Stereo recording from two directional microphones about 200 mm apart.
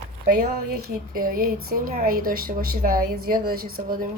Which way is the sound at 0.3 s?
45° right (ahead or behind).